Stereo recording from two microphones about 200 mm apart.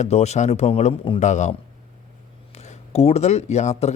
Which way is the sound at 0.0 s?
35° left (ahead or behind).